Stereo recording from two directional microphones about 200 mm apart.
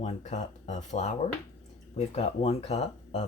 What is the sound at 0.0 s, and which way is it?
Speech, 35° left (ahead or behind).